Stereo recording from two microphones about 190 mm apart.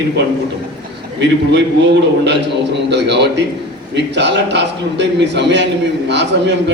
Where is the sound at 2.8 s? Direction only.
65° right (ahead or behind).